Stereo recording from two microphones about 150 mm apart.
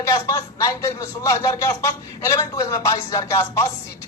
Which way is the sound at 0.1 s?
20° left (ahead or behind).